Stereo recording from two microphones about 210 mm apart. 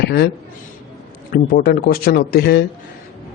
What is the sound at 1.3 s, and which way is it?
Speech, 45° left (ahead or behind).